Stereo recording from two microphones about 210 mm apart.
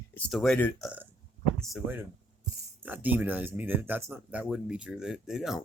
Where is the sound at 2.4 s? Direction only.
10° right (ahead or behind).